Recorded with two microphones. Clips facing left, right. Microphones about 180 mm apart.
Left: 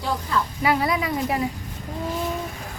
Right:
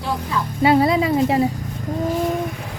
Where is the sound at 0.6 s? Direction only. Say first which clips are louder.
Right 9 dB; 25° right (ahead or behind).